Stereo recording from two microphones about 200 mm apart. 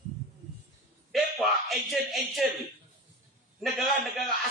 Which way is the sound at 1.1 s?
Centre (ahead or behind).